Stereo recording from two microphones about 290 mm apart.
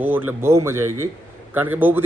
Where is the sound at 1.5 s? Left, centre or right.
Centre.